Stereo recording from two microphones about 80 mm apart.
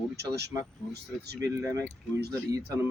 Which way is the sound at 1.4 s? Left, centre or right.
Right.